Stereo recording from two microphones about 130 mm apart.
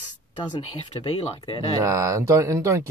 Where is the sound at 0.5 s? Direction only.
45° left (ahead or behind).